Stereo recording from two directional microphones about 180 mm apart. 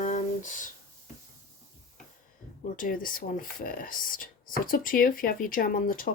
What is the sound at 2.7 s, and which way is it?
Speech, 50° left (ahead or behind).